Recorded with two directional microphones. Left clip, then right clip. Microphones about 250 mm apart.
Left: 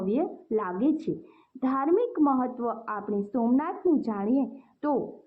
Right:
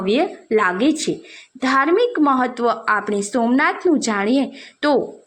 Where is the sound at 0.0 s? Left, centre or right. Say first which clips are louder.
Right 10 dB; right.